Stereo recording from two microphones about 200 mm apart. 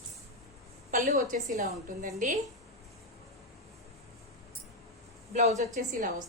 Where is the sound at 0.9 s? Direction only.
40° right (ahead or behind).